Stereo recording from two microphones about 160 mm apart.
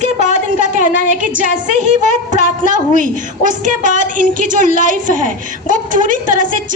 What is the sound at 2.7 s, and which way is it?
A woman's voice, 55° right (ahead or behind).